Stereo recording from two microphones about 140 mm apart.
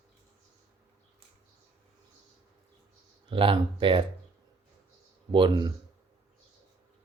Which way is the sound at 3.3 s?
40° right (ahead or behind).